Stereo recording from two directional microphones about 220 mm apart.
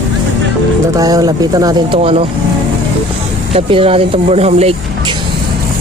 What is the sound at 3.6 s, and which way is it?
Speech, 25° right (ahead or behind).